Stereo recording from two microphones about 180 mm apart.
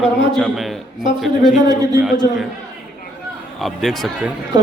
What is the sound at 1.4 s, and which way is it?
Speech, 20° right (ahead or behind).